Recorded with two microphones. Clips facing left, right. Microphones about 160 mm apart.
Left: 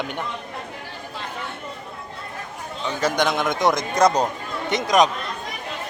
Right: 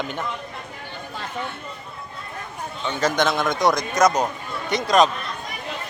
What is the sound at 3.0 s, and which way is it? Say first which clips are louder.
A man's voice: even; 15° left (ahead or behind).